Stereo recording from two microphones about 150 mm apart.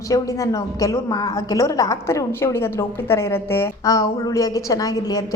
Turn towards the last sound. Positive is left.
turn(degrees=25)  # may be behind; listen again after turning